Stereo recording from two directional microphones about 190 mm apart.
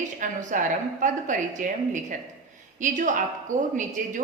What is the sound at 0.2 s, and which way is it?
A woman's voice, 45° right (ahead or behind).